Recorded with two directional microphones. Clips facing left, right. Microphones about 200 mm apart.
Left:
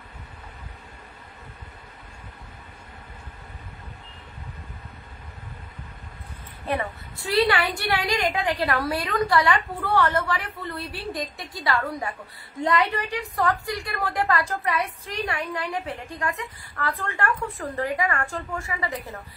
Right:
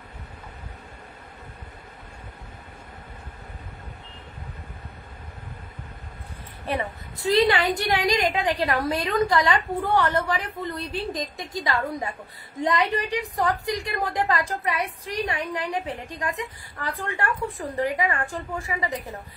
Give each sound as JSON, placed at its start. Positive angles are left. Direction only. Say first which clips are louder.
{"t": 6.8, "sound": "a woman's voice", "louder": "right 2 dB", "side_deg": -20}